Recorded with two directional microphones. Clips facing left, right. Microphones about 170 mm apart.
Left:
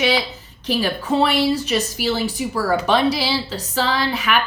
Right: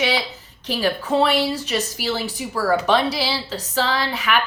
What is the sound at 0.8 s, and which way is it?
A woman's voice, 15° left (ahead or behind).